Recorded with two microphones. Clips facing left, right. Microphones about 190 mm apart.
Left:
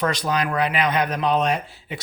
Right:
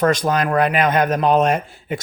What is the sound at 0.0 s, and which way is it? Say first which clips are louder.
Speech: right 5 dB; 50° right (ahead or behind).